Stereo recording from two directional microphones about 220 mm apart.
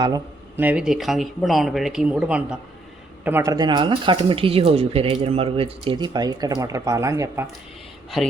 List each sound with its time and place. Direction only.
0.0 s speech: 15° right (ahead or behind)